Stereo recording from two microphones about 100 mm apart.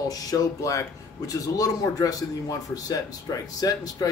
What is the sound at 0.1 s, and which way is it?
Speech, 35° left (ahead or behind).